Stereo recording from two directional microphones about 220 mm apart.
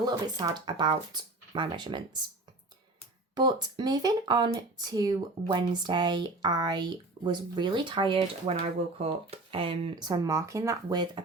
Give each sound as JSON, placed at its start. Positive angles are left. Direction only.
{"t": 0.0, "sound": "speech", "side_deg": -15}
{"t": 3.3, "sound": "speech", "side_deg": -20}